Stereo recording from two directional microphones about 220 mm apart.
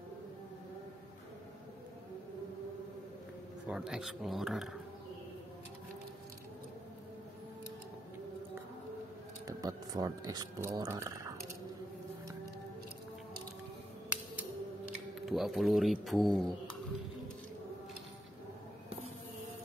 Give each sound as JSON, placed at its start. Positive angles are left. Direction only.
{"t": 3.6, "sound": "speech", "side_deg": -5}
{"t": 9.5, "sound": "speech", "side_deg": -15}
{"t": 15.1, "sound": "speech", "side_deg": 0}